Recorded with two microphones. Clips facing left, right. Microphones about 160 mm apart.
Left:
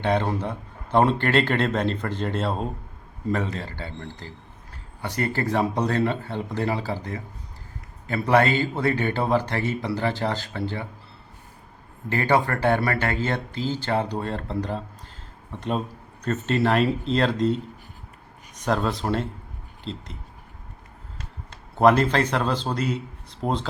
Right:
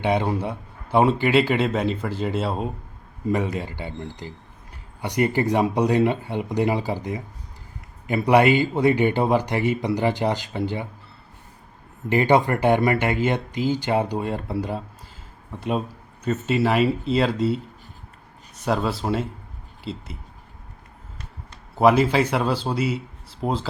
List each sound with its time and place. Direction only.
0.0 s a man's voice: 10° right (ahead or behind)
12.0 s a man's voice: 20° right (ahead or behind)
16.2 s speech: 5° right (ahead or behind)
18.6 s speech: 5° right (ahead or behind)
21.8 s a man's voice: 5° right (ahead or behind)